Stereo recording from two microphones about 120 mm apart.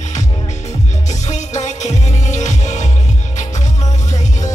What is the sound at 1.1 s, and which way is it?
Music, 80° left.